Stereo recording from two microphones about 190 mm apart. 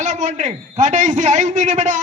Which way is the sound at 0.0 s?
40° right (ahead or behind).